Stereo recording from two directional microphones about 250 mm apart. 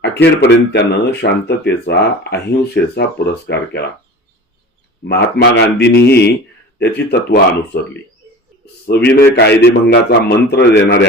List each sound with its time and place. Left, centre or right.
0.4 s speech: left
5.0 s speech: left
8.9 s speech: left